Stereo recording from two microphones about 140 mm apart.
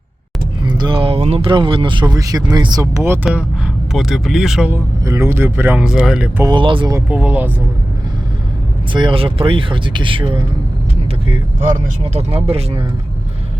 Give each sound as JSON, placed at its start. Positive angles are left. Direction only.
{"t": 0.6, "sound": "speech", "side_deg": -35}
{"t": 3.9, "sound": "speech", "side_deg": 0}
{"t": 4.7, "sound": "speech", "side_deg": -20}
{"t": 6.4, "sound": "speech", "side_deg": -35}
{"t": 7.1, "sound": "speech", "side_deg": -10}
{"t": 8.9, "sound": "speech", "side_deg": -35}
{"t": 12.1, "sound": "speech", "side_deg": -45}